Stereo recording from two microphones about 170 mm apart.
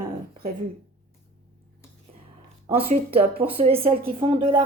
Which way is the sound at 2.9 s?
35° right (ahead or behind).